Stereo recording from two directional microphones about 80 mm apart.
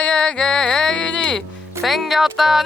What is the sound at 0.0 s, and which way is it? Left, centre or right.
Music, centre.